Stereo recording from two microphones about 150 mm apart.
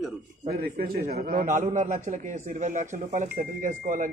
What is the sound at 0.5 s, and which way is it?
A man's voice, 75° right (ahead or behind).